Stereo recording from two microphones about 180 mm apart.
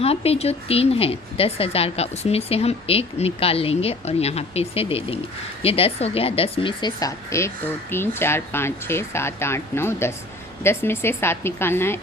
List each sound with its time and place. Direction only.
0.0 s a woman's voice: 35° left (ahead or behind); by 11.9 s 15° left (ahead or behind)